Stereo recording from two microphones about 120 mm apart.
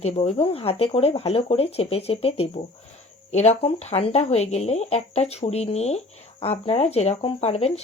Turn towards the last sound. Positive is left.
turn(degrees=60)  # may be behind; listen again after turning